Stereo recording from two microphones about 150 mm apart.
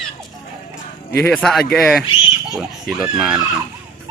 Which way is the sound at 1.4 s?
Centre (ahead or behind).